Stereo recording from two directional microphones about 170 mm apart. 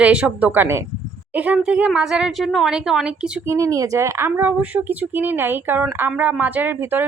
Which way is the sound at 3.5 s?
20° right (ahead or behind).